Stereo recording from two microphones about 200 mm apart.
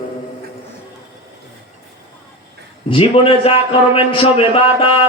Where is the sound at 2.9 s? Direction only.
30° left (ahead or behind).